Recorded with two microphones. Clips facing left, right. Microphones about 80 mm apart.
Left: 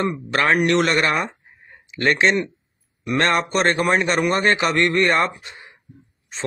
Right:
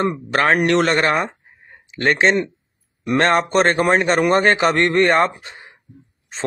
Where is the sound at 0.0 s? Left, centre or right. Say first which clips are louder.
Right 2 dB; right.